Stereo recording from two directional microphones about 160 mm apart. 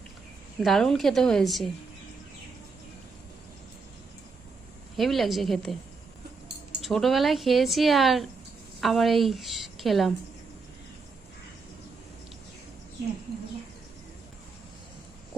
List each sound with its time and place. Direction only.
0.6 s a woman's voice: centre (ahead or behind)
4.9 s a woman's voice: centre (ahead or behind)
6.8 s a woman's voice: centre (ahead or behind)